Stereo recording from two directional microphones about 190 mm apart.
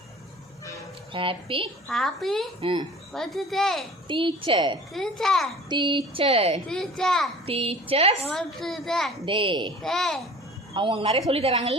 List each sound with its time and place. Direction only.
1.1 s a woman's voice: 25° right (ahead or behind)
1.9 s a child's voice: centre (ahead or behind)
2.6 s a woman's voice: 30° right (ahead or behind)
3.1 s a child's voice: centre (ahead or behind)
4.1 s a woman's voice: 25° right (ahead or behind)
4.9 s a child's voice: centre (ahead or behind)
5.6 s a woman's voice: 25° right (ahead or behind)
6.7 s a child's voice: 5° left (ahead or behind)
7.4 s a woman's voice: 30° right (ahead or behind)
8.3 s a child's voice: centre (ahead or behind)
9.2 s a woman's voice: 25° right (ahead or behind)
9.8 s a child's voice: centre (ahead or behind)
10.8 s a woman's voice: 25° right (ahead or behind)